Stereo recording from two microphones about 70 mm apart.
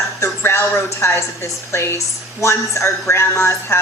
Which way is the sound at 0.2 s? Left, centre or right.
Left.